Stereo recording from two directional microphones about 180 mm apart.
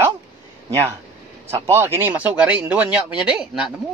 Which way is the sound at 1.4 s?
15° right (ahead or behind).